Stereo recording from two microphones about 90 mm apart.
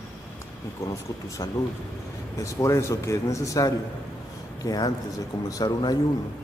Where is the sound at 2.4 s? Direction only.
35° left (ahead or behind).